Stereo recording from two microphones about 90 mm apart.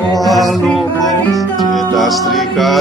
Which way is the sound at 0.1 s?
Centre (ahead or behind).